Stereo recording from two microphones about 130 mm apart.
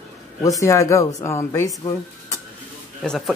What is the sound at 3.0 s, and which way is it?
Speech, 5° left (ahead or behind).